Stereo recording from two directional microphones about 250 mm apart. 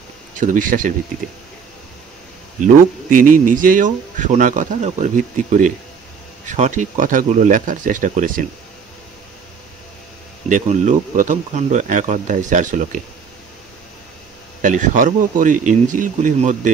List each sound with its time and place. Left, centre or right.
0.4 s speech: right
3.4 s speech: right
10.5 s speech: right
14.6 s speech: right